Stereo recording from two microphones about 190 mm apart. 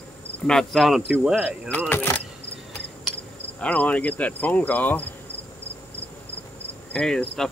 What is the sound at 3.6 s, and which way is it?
Speech, 5° left (ahead or behind).